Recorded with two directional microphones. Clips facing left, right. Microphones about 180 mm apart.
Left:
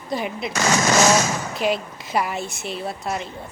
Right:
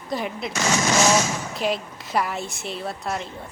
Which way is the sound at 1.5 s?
Centre (ahead or behind).